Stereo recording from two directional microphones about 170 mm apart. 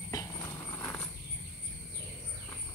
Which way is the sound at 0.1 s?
20° left (ahead or behind).